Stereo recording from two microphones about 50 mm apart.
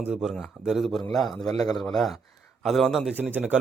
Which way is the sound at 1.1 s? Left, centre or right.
Centre.